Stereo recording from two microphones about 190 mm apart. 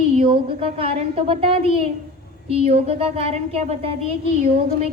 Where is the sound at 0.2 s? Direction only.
30° right (ahead or behind).